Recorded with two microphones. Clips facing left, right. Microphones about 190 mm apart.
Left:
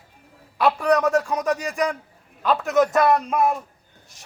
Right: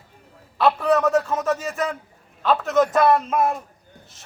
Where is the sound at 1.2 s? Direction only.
15° left (ahead or behind).